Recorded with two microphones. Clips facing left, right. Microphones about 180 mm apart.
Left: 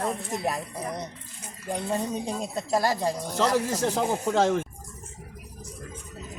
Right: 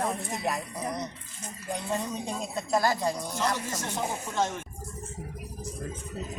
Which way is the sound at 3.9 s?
90° left.